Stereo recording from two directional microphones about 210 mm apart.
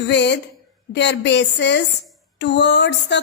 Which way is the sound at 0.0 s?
55° left (ahead or behind).